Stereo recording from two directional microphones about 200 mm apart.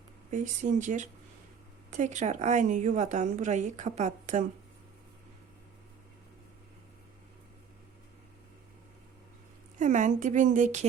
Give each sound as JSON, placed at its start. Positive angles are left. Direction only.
{"t": 0.3, "sound": "a woman's voice", "side_deg": -40}
{"t": 9.7, "sound": "a woman's voice", "side_deg": -40}